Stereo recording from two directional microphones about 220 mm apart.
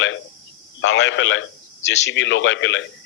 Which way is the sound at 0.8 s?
55° left (ahead or behind).